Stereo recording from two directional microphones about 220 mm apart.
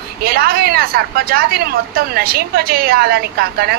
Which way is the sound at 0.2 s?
45° right (ahead or behind).